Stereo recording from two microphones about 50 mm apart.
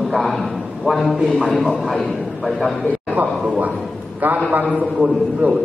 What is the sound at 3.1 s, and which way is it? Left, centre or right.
A man's voice, right.